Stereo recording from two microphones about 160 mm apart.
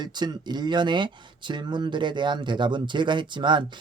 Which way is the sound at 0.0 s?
25° right (ahead or behind).